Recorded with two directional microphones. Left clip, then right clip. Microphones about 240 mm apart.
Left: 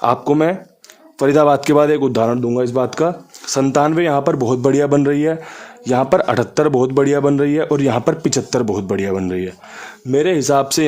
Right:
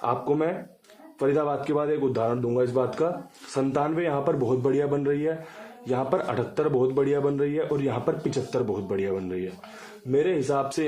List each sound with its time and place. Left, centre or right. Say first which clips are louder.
0.0 s a man's voice: left 10 dB; left